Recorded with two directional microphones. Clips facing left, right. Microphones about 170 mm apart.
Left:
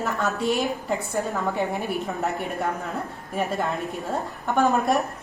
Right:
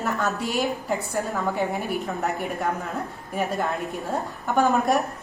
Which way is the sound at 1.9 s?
Centre (ahead or behind).